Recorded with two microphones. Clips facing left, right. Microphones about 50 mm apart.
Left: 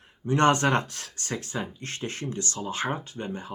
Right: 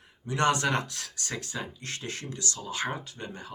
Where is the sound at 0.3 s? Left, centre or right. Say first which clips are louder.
Left 4 dB; left.